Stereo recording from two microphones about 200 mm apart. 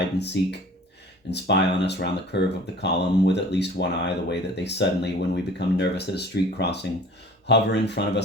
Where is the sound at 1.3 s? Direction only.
60° left (ahead or behind).